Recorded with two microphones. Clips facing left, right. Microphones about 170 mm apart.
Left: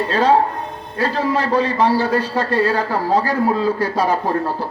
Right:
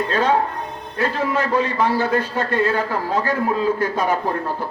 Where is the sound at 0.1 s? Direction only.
30° left (ahead or behind).